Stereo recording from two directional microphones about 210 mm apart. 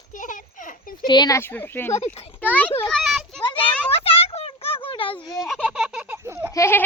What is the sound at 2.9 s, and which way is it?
Children playing, centre (ahead or behind).